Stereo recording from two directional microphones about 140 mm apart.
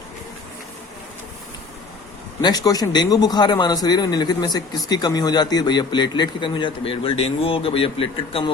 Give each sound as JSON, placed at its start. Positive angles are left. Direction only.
{"t": 2.4, "sound": "a man's voice", "side_deg": 30}